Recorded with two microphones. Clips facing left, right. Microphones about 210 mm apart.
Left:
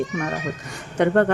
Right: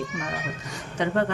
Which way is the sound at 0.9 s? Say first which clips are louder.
Left 7 dB; 55° left (ahead or behind).